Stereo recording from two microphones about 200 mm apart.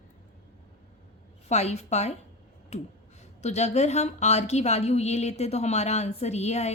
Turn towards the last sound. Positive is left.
turn(degrees=35)  # may be behind; listen again after turning